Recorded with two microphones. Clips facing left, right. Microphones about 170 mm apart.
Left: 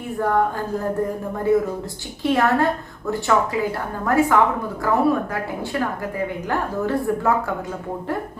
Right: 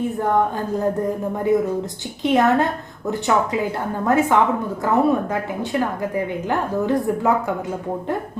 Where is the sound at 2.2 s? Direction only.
20° right (ahead or behind).